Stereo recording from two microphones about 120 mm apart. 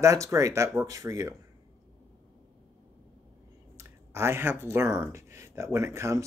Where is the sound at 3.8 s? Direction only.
25° right (ahead or behind).